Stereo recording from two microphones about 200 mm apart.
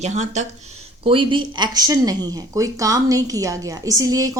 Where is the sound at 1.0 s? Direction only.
25° right (ahead or behind).